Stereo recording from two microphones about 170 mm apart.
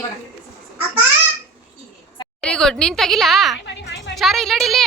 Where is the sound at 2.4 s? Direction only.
5° left (ahead or behind).